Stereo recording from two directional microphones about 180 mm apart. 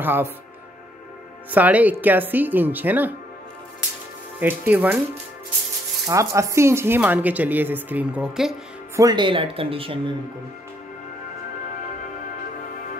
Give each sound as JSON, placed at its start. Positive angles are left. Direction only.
{"t": 0.0, "sound": "speech", "side_deg": -10}
{"t": 1.5, "sound": "speech", "side_deg": -10}
{"t": 4.4, "sound": "speech", "side_deg": -10}
{"t": 6.0, "sound": "speech", "side_deg": -15}
{"t": 8.9, "sound": "speech", "side_deg": -20}